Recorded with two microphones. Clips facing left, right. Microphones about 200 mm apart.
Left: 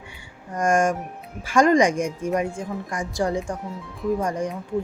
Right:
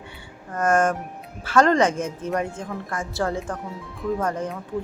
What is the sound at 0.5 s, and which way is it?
Speech, 10° left (ahead or behind).